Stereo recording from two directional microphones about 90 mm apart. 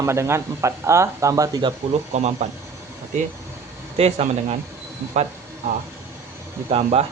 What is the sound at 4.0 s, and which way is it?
Speech, 90° right.